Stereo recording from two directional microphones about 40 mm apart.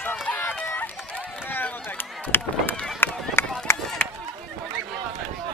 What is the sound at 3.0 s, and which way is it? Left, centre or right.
Run, left.